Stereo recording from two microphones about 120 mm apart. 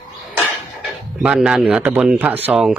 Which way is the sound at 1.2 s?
5° right (ahead or behind).